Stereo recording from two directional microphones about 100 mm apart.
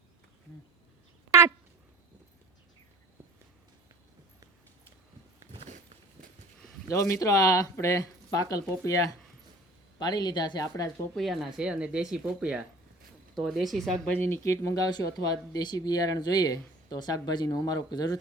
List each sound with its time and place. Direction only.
1.3 s a sound: 25° right (ahead or behind)
6.9 s speech: 35° left (ahead or behind)
10.0 s speech: 45° left (ahead or behind)
11.1 s speech: centre (ahead or behind)
14.3 s speech: 25° left (ahead or behind)
14.9 s speech: 40° left (ahead or behind)